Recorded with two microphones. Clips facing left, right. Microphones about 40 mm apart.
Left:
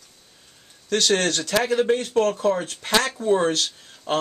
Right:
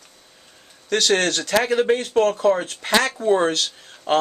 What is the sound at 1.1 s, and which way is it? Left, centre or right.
Speech, right.